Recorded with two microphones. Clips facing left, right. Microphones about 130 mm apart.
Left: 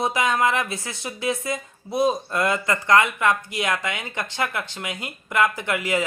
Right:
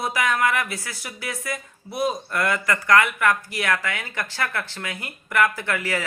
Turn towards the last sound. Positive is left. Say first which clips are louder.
# left 2 dB
turn(degrees=20)  # may be behind; listen again after turning